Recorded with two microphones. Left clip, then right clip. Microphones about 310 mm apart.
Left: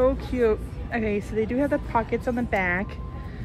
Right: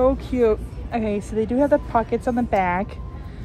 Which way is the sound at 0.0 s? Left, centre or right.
Right.